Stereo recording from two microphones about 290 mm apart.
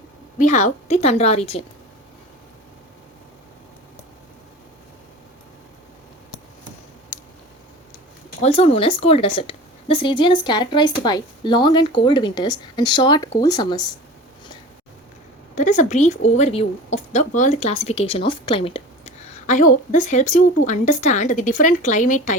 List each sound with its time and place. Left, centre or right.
0.3 s speech: left
8.4 s a woman's voice: left
15.5 s speech: left